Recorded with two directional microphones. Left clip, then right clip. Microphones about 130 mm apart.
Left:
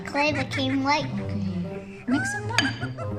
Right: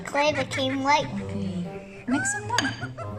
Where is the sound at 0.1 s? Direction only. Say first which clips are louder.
Right 1 dB; centre (ahead or behind).